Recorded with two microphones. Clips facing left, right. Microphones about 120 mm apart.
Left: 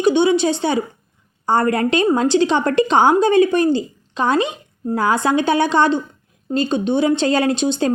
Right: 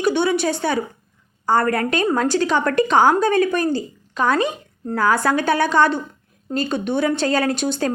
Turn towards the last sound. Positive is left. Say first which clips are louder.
# left 3 dB
turn(degrees=25)  # may be behind; listen again after turning